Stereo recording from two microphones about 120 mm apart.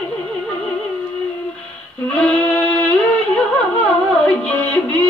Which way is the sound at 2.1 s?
10° left (ahead or behind).